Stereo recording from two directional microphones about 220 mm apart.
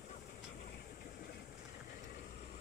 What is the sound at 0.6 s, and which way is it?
Vehicle, 45° left (ahead or behind).